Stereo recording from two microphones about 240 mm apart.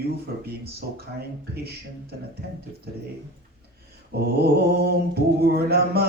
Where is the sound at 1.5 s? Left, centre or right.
Right.